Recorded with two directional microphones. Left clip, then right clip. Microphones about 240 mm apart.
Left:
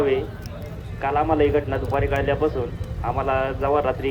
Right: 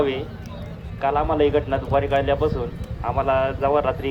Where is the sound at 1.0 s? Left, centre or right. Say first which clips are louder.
Even; right.